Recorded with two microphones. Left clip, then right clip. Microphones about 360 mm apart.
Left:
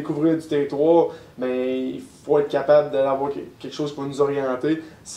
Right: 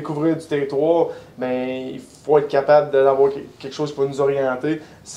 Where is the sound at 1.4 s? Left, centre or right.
Right.